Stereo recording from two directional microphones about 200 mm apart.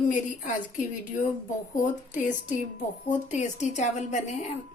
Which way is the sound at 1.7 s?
40° left (ahead or behind).